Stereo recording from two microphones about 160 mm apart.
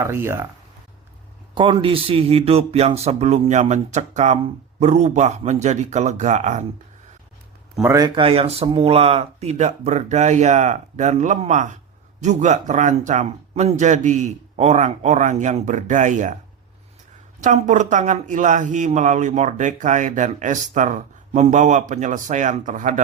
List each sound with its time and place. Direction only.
0.0 s speech: 15° right (ahead or behind)
1.5 s speech: 30° right (ahead or behind); by 6.7 s 50° right (ahead or behind)
7.8 s speech: 20° right (ahead or behind); by 16.3 s 50° right (ahead or behind)
17.4 s speech: 50° right (ahead or behind)